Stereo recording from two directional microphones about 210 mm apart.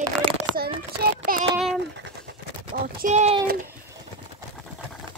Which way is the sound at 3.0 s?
30° right (ahead or behind).